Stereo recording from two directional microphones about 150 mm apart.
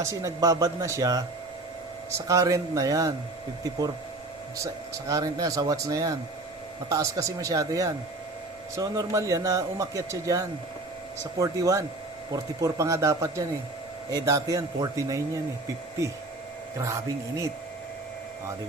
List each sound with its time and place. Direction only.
0.0 s speech: 20° right (ahead or behind)
4.5 s speech: 20° right (ahead or behind)
16.7 s speech: 20° right (ahead or behind)